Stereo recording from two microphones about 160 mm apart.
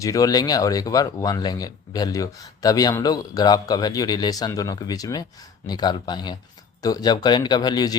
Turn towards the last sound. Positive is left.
turn(degrees=25)  # may be behind; listen again after turning